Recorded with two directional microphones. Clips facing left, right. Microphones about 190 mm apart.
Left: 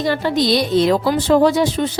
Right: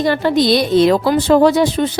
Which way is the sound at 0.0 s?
55° right (ahead or behind).